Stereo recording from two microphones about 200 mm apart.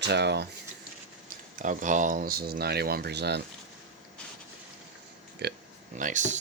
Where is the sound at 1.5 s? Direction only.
40° right (ahead or behind); by 3.4 s 55° right (ahead or behind).